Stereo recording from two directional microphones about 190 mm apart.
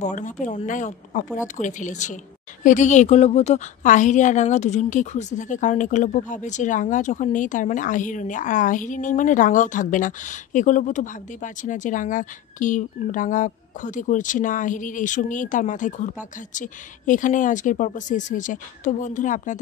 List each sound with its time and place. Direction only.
0.0 s a woman's voice: 40° left (ahead or behind)